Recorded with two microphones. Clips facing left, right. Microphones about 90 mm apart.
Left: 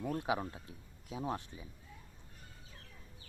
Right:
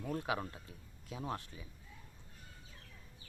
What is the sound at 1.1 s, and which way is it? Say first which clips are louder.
Speech: left 3 dB; 15° left (ahead or behind).